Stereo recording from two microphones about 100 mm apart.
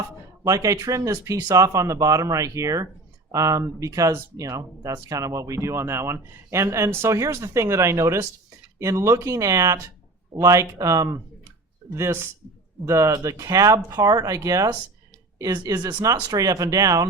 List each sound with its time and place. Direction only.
0.4 s speech: 35° right (ahead or behind)